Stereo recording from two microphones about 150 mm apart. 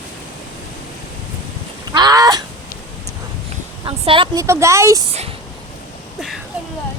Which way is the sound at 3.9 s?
35° right (ahead or behind).